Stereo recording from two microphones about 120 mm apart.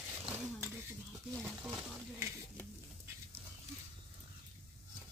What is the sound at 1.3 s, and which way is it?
Speech, centre (ahead or behind).